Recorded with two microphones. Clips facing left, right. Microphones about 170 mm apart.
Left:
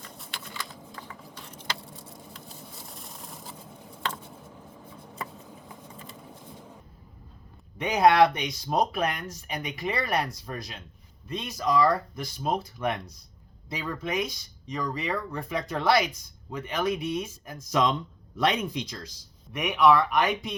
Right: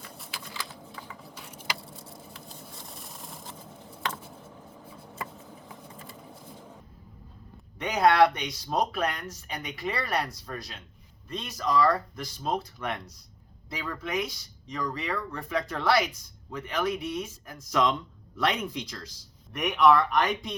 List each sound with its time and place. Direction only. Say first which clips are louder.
0.0 s a sound: even; 5° right (ahead or behind)
7.8 s speech: left 2 dB; 15° left (ahead or behind)
19.5 s speech: even; 5° left (ahead or behind)